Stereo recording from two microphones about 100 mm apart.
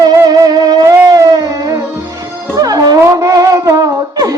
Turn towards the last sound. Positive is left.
turn(degrees=-35)  # may be behind; listen again after turning